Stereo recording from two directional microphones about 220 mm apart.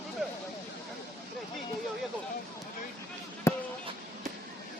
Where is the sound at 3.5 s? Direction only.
15° left (ahead or behind).